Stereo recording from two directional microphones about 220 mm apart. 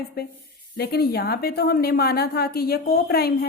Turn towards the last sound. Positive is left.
turn(degrees=45)  # may be behind; listen again after turning